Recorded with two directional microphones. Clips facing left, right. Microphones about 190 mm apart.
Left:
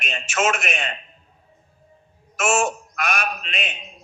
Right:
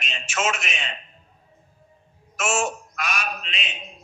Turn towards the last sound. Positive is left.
turn(degrees=55)  # may be behind; listen again after turning